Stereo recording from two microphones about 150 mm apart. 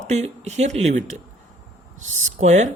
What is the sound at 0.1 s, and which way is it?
Speech, 50° right (ahead or behind).